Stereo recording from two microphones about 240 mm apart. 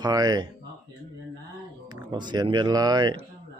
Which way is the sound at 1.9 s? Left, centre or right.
Centre.